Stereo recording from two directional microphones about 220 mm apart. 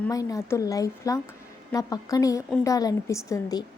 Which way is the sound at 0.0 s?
15° left (ahead or behind).